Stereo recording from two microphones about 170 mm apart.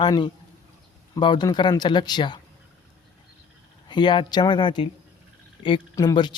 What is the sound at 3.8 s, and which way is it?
Speech, 25° left (ahead or behind).